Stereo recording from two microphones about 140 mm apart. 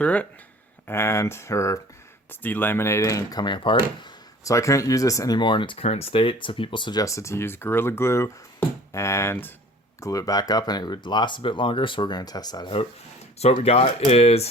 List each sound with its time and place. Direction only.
0.0 s speech: 10° left (ahead or behind); by 4.1 s 35° left (ahead or behind)
4.4 s speech: 20° left (ahead or behind)
13.4 s speech: 50° left (ahead or behind)